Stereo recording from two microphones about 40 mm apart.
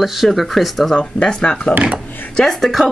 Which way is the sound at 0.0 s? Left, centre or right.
Centre.